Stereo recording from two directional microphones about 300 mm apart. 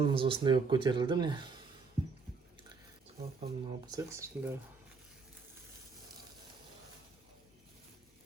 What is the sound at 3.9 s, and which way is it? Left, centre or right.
Speech, centre.